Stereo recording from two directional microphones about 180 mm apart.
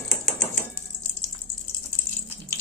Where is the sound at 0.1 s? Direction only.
Centre (ahead or behind).